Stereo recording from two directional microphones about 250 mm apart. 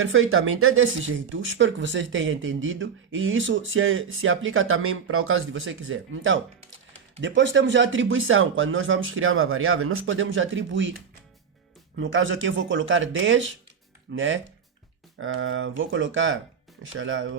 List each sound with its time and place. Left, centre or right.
0.0 s speech: right
11.9 s speech: right